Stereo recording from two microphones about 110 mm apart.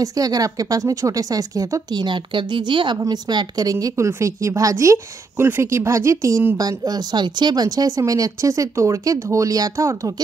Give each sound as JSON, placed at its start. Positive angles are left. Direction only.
{"t": 0.0, "sound": "speech", "side_deg": -35}
{"t": 3.8, "sound": "a woman's voice", "side_deg": -25}